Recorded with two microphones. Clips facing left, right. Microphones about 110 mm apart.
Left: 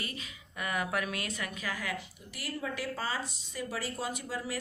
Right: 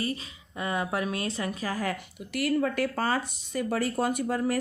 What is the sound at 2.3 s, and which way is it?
Speech, 65° right (ahead or behind).